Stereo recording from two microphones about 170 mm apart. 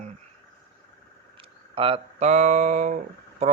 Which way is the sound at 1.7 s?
35° right (ahead or behind).